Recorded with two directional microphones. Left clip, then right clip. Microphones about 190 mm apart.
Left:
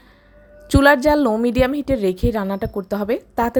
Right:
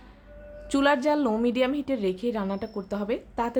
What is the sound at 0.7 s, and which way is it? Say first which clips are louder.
A woman's voice: left 9 dB; 35° left (ahead or behind).